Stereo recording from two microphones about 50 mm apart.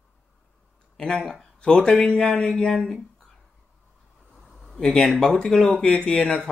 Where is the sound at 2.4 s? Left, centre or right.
Centre.